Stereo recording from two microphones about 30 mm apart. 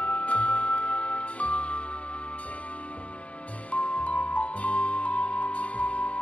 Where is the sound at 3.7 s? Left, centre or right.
Left.